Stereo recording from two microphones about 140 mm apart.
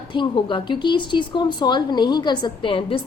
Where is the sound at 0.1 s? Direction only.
35° left (ahead or behind).